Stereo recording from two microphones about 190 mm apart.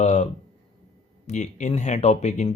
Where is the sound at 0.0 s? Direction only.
40° left (ahead or behind).